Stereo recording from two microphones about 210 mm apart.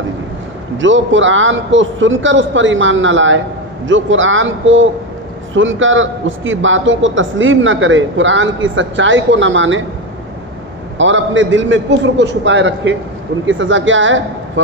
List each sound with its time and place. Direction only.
0.7 s a man's voice: 65° right (ahead or behind)
11.0 s a man's voice: 65° right (ahead or behind)